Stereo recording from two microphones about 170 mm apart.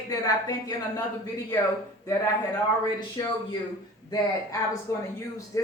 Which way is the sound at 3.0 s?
25° left (ahead or behind).